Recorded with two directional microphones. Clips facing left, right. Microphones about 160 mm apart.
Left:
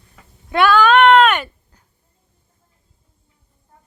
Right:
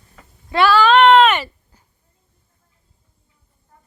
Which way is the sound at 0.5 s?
Centre (ahead or behind).